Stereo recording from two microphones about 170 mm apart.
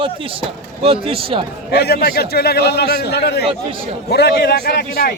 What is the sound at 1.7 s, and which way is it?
A man's voice, 70° left (ahead or behind).